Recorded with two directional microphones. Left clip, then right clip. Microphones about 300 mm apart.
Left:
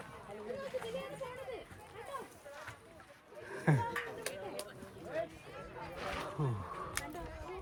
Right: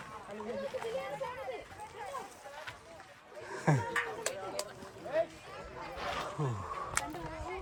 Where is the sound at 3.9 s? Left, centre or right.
Right.